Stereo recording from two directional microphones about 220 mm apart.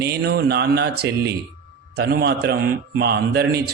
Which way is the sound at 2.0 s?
45° right (ahead or behind).